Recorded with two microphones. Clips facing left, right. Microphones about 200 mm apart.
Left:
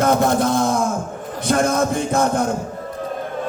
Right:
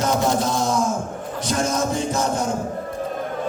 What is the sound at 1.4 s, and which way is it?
A man's voice, 55° left (ahead or behind).